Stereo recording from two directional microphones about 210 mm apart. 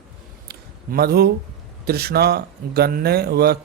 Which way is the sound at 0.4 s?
50° right (ahead or behind).